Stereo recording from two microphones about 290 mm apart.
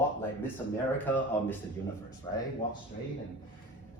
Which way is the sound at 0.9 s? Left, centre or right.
Centre.